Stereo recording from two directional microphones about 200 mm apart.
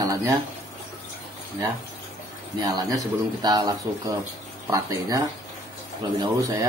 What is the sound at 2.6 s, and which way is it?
Speech, 20° right (ahead or behind).